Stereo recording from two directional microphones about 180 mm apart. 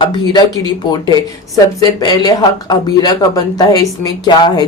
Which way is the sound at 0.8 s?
25° left (ahead or behind).